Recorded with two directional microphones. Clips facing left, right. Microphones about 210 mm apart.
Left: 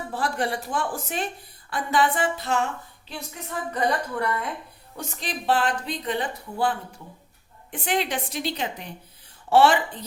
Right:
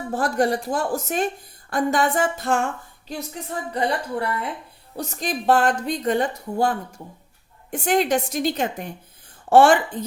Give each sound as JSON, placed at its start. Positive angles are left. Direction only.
{"t": 0.1, "sound": "a woman's voice", "side_deg": -45}
{"t": 3.7, "sound": "a woman's voice", "side_deg": -30}
{"t": 4.9, "sound": "a woman's voice", "side_deg": -40}